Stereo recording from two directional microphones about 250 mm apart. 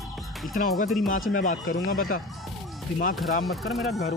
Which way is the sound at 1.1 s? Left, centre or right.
Left.